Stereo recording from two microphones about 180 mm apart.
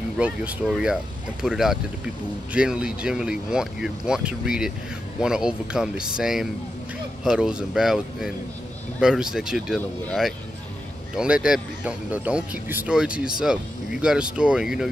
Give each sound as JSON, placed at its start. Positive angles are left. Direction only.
{"t": 0.2, "sound": "speech", "side_deg": -5}